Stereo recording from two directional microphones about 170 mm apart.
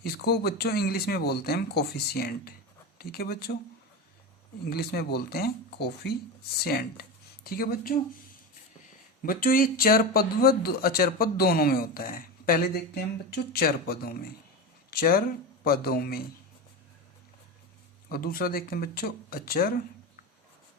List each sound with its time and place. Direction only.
0.0 s speech: 70° left (ahead or behind)
4.7 s speech: 70° left (ahead or behind)
9.2 s speech: 55° left (ahead or behind)
14.8 s a sound: 60° left (ahead or behind)
15.6 s speech: 60° left (ahead or behind)
18.1 s speech: 60° left (ahead or behind)